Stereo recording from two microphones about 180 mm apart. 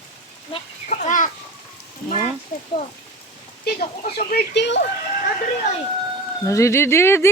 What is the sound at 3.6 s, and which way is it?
Speech, 60° left (ahead or behind).